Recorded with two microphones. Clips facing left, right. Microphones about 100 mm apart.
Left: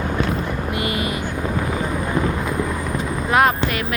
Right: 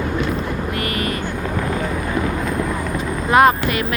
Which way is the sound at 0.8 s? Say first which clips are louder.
Left 1 dB; 20° left (ahead or behind).